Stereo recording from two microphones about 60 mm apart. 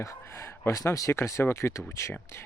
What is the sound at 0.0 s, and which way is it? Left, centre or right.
Speech, left.